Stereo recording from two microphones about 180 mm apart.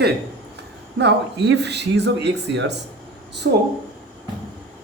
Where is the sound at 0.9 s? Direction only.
70° right (ahead or behind).